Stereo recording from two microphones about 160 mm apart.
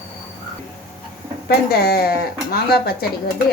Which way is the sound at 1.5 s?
75° left (ahead or behind).